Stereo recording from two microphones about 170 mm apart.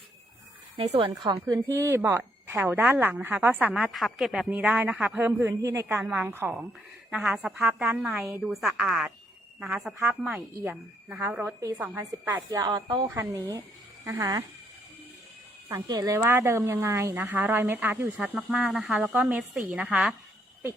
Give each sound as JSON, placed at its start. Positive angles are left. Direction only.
{"t": 1.0, "sound": "a woman's voice", "side_deg": -25}
{"t": 15.7, "sound": "a woman's voice", "side_deg": -20}